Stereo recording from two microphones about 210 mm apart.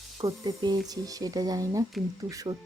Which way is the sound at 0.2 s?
20° right (ahead or behind).